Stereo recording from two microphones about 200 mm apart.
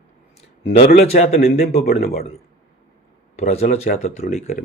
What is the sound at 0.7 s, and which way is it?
Speech, 30° left (ahead or behind).